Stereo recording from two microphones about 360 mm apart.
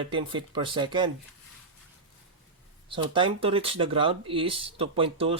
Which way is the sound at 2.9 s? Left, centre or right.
Centre.